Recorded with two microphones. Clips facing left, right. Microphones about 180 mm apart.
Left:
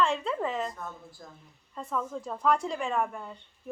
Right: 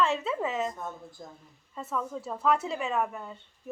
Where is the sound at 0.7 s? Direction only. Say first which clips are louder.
Right 3 dB; 20° right (ahead or behind).